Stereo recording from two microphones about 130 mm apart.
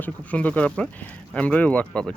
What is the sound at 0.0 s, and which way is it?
Speech, 10° left (ahead or behind).